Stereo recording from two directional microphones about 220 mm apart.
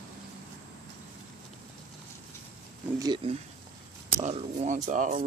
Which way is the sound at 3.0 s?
20° right (ahead or behind).